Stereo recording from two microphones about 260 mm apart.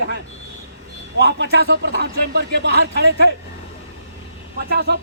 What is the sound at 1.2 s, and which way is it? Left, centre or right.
A man's voice, right.